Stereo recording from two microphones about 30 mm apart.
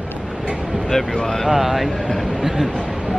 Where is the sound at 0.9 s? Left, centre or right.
Centre.